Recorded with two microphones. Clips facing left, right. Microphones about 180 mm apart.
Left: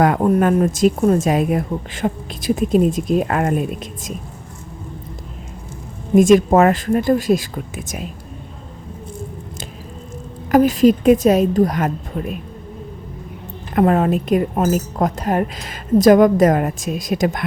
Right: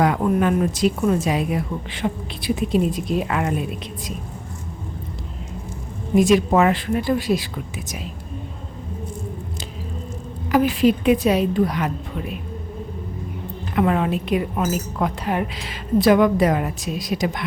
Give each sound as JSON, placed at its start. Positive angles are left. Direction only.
{"t": 0.0, "sound": "a woman's voice", "side_deg": 45}
{"t": 6.1, "sound": "a woman's voice", "side_deg": 45}
{"t": 10.5, "sound": "a woman's voice", "side_deg": 40}
{"t": 13.7, "sound": "a woman's voice", "side_deg": 45}